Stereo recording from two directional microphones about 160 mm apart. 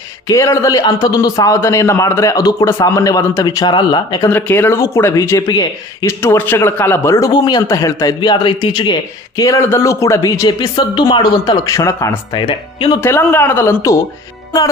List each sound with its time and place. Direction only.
0.3 s speech: 20° left (ahead or behind)
4.3 s speech: 15° left (ahead or behind)
12.4 s speech: 30° left (ahead or behind)
13.0 s speech: 15° left (ahead or behind)